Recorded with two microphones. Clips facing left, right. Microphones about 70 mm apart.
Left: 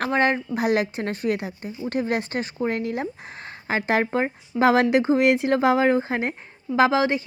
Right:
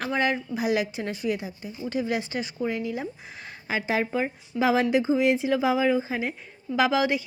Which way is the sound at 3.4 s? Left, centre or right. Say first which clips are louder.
Left 4 dB; left.